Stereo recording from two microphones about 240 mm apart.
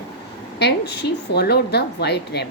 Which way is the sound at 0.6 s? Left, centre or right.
Left.